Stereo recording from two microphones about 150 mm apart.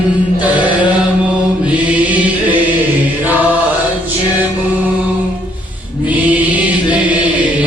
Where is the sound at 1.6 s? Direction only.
10° right (ahead or behind).